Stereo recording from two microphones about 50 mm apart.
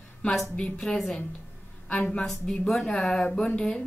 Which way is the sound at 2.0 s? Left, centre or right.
Left.